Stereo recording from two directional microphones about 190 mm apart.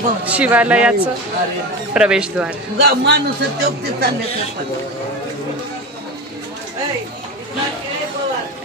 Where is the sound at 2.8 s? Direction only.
60° right (ahead or behind).